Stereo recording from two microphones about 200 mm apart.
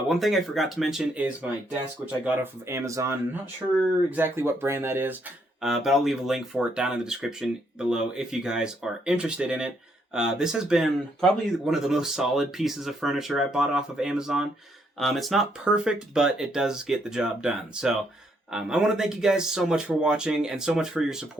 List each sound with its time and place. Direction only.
0.1 s speech: centre (ahead or behind)